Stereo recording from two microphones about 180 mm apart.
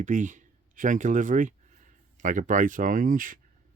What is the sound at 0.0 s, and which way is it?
Speech, 45° right (ahead or behind).